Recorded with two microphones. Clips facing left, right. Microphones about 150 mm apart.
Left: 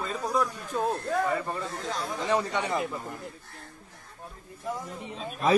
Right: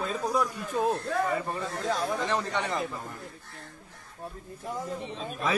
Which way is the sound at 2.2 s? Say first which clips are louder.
Left 2 dB; 15° left (ahead or behind).